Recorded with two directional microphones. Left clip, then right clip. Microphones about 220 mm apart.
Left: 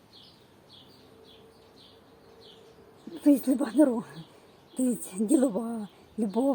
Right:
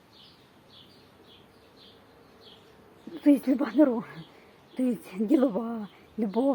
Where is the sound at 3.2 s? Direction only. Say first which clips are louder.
Right 1 dB; 15° left (ahead or behind).